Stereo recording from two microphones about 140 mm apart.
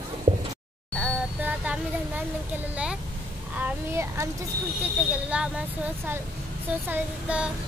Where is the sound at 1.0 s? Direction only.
5° right (ahead or behind).